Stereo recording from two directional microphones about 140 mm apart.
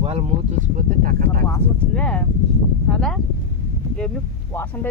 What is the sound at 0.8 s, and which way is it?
Speech, 80° right.